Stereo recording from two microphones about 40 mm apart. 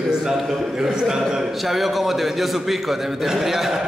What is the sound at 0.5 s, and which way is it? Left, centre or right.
A man's voice, centre.